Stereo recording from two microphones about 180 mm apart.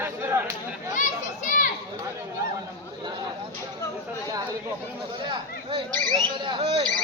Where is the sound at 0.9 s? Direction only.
45° left (ahead or behind).